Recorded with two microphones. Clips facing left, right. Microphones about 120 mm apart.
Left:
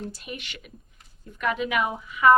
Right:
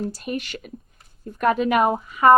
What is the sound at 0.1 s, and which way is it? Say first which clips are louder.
A woman's voice: right 10 dB; 45° right (ahead or behind).